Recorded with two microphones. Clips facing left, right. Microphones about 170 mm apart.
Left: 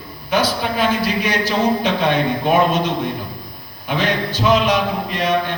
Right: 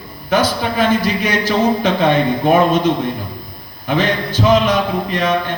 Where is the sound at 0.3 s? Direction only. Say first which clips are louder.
Right 3 dB; 45° right (ahead or behind).